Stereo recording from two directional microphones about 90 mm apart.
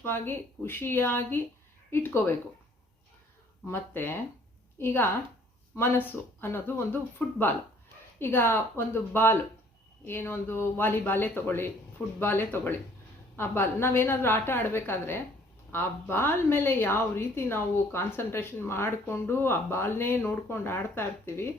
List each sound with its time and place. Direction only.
0.0 s a woman's voice: 25° left (ahead or behind)
3.7 s a woman's voice: 25° left (ahead or behind)